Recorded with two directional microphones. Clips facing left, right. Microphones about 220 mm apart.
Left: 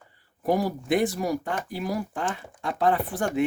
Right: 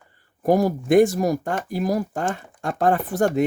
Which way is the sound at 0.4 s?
45° right (ahead or behind).